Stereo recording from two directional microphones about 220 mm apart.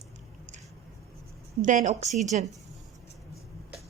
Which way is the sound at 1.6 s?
35° right (ahead or behind).